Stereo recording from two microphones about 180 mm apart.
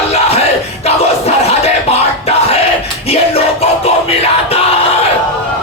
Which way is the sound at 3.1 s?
35° left (ahead or behind).